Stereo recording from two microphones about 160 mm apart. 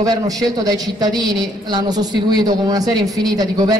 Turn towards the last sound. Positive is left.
turn(degrees=-25)  # may be behind; listen again after turning